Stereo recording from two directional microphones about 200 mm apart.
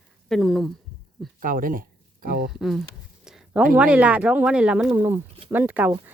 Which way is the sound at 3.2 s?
5° right (ahead or behind).